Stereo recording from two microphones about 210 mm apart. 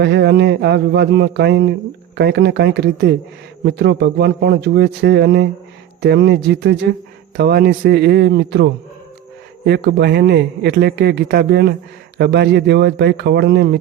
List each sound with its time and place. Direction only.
0.0 s speech: 55° right (ahead or behind)